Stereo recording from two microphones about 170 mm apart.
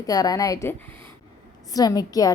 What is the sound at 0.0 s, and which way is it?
A woman's voice, 20° left (ahead or behind).